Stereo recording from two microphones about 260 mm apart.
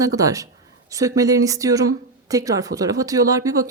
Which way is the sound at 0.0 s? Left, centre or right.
Centre.